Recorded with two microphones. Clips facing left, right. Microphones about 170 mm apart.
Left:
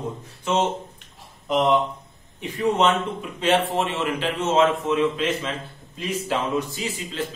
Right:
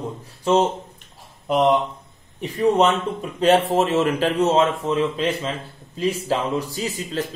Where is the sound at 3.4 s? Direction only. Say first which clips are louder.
Right 5 dB; 40° right (ahead or behind).